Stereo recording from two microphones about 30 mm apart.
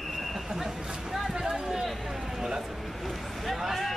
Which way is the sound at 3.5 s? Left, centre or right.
Centre.